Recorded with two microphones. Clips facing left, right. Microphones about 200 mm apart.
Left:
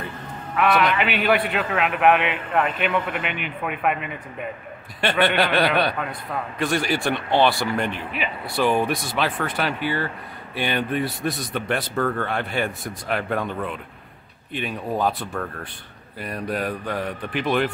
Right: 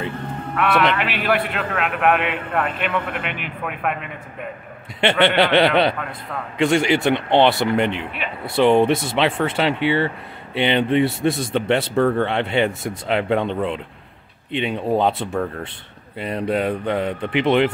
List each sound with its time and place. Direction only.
0.6 s a man's voice: centre (ahead or behind)
5.2 s speech: 25° right (ahead or behind)